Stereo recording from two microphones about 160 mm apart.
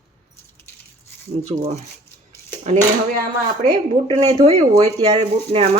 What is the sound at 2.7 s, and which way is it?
Speech, 45° right (ahead or behind).